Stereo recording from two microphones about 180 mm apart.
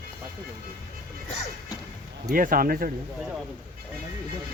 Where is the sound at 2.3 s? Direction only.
50° right (ahead or behind).